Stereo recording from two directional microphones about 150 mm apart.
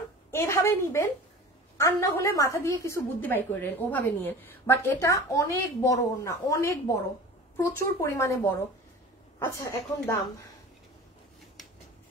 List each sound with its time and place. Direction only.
0.3 s a woman's voice: 15° left (ahead or behind)
8.0 s a woman's voice: 20° left (ahead or behind)